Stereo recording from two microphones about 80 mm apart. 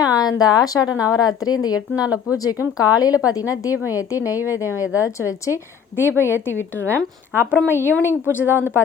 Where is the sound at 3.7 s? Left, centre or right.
Right.